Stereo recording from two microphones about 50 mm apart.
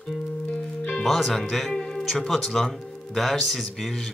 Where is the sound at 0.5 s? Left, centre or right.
Left.